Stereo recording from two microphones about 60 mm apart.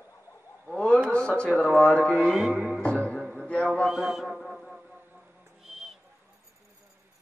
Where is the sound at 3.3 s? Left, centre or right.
Centre.